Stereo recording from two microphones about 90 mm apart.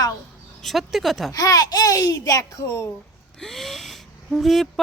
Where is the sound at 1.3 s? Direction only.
40° left (ahead or behind).